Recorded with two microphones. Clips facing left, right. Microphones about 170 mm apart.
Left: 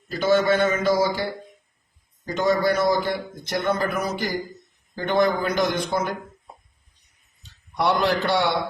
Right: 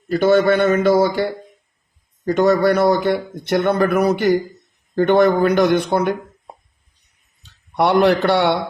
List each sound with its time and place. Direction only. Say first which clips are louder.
0.1 s a man's voice: right 5 dB; 60° right (ahead or behind)
7.7 s a man's voice: right 7 dB; 65° right (ahead or behind)